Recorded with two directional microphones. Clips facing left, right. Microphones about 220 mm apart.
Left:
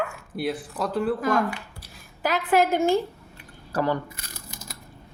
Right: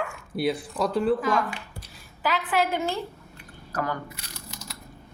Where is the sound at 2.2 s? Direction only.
45° left (ahead or behind).